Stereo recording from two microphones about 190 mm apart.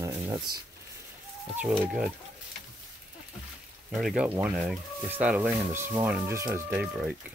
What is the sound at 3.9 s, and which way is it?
Speech, 5° right (ahead or behind).